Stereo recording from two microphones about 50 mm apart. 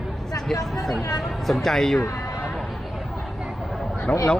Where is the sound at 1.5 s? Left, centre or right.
Centre.